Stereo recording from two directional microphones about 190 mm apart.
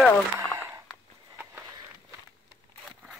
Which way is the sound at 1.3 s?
10° right (ahead or behind).